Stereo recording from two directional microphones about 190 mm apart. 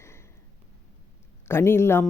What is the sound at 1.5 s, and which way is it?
Speech, 15° left (ahead or behind).